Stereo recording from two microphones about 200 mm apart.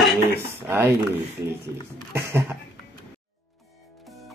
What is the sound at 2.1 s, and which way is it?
Speech, 10° right (ahead or behind).